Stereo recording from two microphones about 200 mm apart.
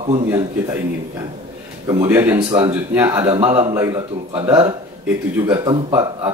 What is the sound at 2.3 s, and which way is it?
Speech, 20° right (ahead or behind).